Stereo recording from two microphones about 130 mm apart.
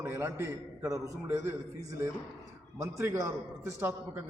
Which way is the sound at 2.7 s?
20° right (ahead or behind).